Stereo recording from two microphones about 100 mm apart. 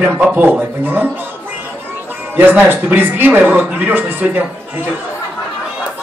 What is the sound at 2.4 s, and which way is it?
A man's voice, 20° right (ahead or behind).